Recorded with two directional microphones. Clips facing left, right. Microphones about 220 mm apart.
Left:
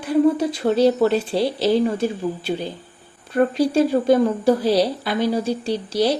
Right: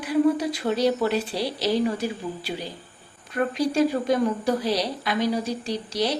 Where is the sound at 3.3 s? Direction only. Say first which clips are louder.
Left 6 dB; 30° left (ahead or behind).